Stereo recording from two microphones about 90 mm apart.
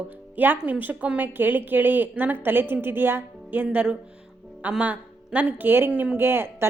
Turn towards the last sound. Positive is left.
turn(degrees=-25)  # may be behind; listen again after turning